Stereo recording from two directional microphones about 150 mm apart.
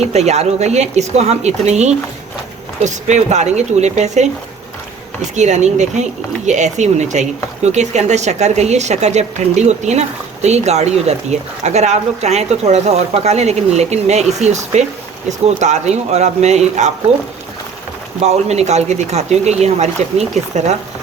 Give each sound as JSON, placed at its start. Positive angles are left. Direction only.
{"t": 0.0, "sound": "speech", "side_deg": -45}
{"t": 5.3, "sound": "speech", "side_deg": -50}
{"t": 18.2, "sound": "speech", "side_deg": -45}